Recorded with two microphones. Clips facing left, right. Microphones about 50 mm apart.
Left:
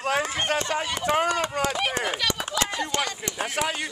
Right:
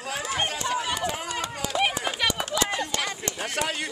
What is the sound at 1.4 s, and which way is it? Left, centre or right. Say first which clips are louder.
Chop: left 6 dB; left.